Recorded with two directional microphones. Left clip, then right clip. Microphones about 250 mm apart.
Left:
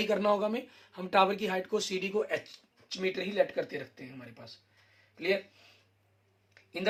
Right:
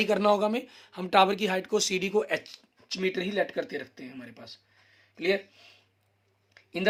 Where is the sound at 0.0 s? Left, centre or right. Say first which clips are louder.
Right 4 dB; right.